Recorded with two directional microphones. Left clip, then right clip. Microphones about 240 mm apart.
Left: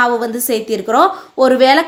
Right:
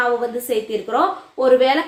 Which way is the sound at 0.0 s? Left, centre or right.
Left.